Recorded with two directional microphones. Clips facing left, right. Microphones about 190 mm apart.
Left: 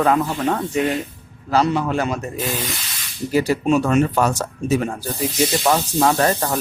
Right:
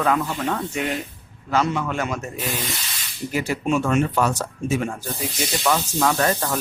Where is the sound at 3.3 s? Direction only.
35° left (ahead or behind).